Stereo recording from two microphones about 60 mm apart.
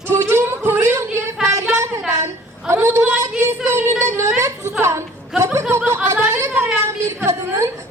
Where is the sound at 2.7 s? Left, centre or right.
Right.